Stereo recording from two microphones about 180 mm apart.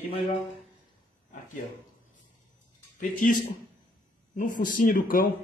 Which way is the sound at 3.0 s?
50° left (ahead or behind).